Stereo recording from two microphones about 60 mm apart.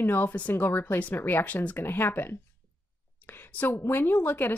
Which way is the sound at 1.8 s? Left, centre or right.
Left.